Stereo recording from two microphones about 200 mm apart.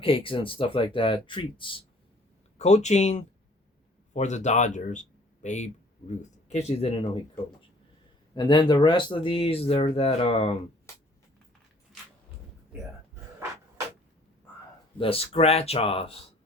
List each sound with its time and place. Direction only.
0.0 s speech: 25° left (ahead or behind)
8.4 s speech: 20° left (ahead or behind)
14.9 s speech: 30° left (ahead or behind)